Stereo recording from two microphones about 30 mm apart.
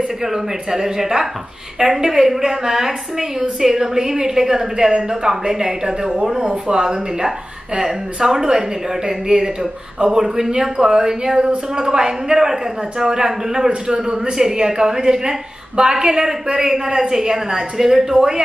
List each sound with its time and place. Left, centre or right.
0.2 s a woman's voice: centre